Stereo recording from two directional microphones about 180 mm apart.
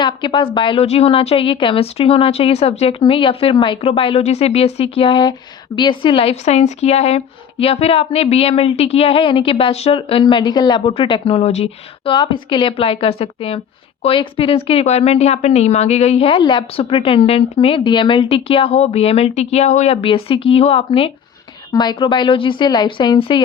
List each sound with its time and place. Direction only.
0.0 s a woman's voice: 25° left (ahead or behind)